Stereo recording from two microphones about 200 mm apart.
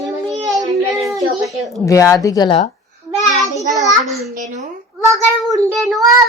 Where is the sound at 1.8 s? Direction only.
15° left (ahead or behind).